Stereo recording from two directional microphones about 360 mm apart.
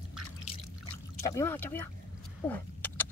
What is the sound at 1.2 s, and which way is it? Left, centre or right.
Speech, centre.